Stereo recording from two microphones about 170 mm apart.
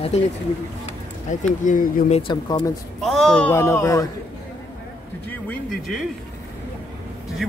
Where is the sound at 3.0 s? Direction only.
Centre (ahead or behind).